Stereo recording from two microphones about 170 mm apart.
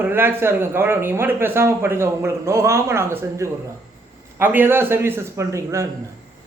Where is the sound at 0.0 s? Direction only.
15° right (ahead or behind).